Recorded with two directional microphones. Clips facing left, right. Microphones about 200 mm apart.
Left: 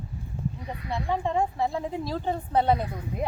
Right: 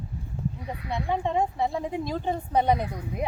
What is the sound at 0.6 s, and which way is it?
Speech, 10° right (ahead or behind).